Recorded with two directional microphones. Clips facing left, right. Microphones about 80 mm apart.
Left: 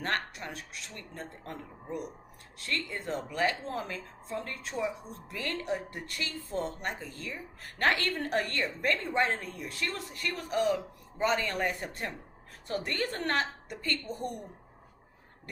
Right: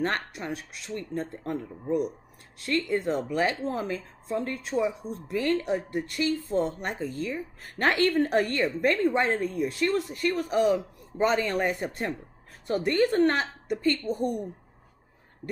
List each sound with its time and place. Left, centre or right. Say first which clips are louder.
0.0 s a woman's voice: right 4 dB; right
2.6 s a woman's voice: right 9 dB; right